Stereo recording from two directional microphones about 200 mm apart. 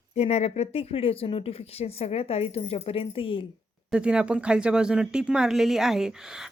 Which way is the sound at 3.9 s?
5° right (ahead or behind).